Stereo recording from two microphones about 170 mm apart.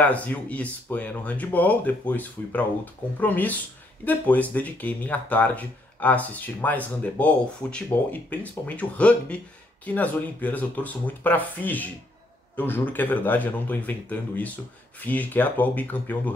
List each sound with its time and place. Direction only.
0.0 s speech: 10° left (ahead or behind)